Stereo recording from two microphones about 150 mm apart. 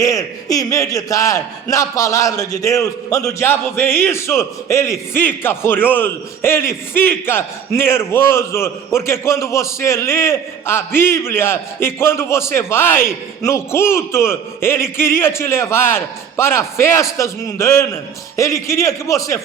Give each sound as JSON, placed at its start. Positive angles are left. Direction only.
{"t": 0.0, "sound": "speech", "side_deg": 20}